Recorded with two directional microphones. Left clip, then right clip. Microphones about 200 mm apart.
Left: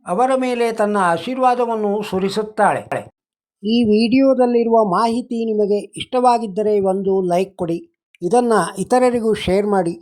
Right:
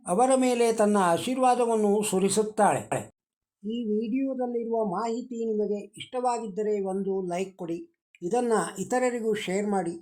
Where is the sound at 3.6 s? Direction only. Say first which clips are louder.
Left 14 dB; 45° left (ahead or behind).